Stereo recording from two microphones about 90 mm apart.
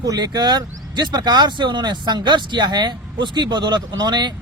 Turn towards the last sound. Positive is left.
turn(degrees=-55)  # may be behind; listen again after turning